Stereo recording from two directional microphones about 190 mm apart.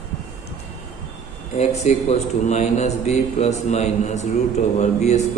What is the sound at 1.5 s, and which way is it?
A man's voice, 35° left (ahead or behind).